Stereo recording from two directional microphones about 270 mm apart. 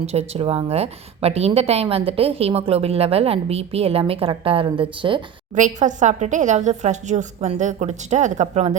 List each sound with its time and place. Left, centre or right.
0.0 s a woman's voice: right